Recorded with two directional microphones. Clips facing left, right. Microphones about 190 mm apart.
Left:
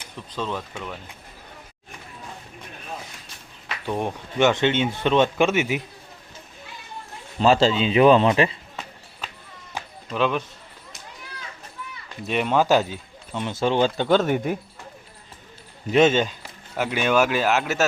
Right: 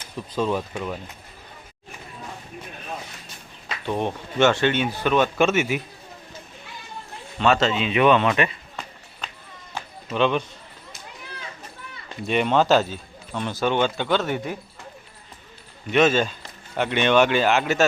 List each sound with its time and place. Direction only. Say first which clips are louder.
0.2 s speech: right 5 dB; 10° right (ahead or behind)
3.8 s speech: right 1 dB; 10° left (ahead or behind); by 5.3 s 25° left (ahead or behind)
5.4 s a man's voice: even; 15° left (ahead or behind)
7.3 s a man's voice: left 2 dB; 30° left (ahead or behind)
10.1 s speech: right 2 dB; centre (ahead or behind)
12.2 s speech: right 1 dB; centre (ahead or behind); by 14.3 s 45° left (ahead or behind)
14.3 s a man's voice: left 4 dB; 10° left (ahead or behind)
15.9 s speech: left 1 dB; 25° left (ahead or behind)
16.4 s speech: right 1 dB; 5° left (ahead or behind)